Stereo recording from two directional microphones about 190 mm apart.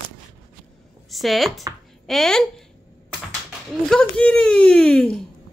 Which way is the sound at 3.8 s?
5° left (ahead or behind).